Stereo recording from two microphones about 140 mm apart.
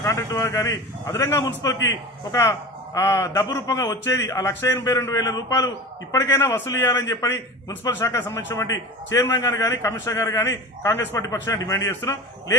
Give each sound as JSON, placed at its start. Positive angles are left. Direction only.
{"t": 0.0, "sound": "a man's voice", "side_deg": 25}